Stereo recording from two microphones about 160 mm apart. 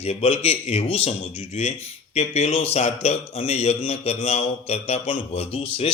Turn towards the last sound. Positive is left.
turn(degrees=35)  # may be behind; listen again after turning